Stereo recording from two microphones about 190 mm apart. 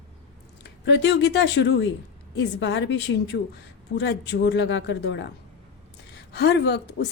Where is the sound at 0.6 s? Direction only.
65° left (ahead or behind).